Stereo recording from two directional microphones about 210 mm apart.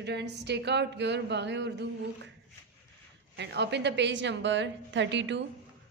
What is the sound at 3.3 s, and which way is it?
A woman's voice, 55° right (ahead or behind).